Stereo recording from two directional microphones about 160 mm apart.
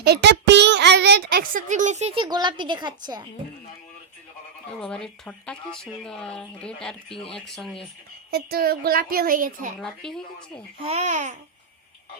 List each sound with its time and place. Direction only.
0.0 s a sound: 90° right; by 2.1 s 45° right (ahead or behind)
2.1 s a woman's voice: 30° right (ahead or behind)
4.8 s speech: 5° left (ahead or behind)
8.3 s a woman's voice: 75° right (ahead or behind); by 9.6 s 60° right (ahead or behind)
9.8 s speech: 5° left (ahead or behind)
10.8 s speech: 45° right (ahead or behind)